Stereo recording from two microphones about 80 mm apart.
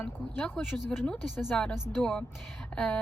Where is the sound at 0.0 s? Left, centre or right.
Centre.